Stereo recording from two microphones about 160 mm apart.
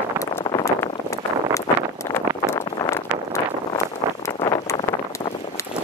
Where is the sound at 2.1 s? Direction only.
15° left (ahead or behind).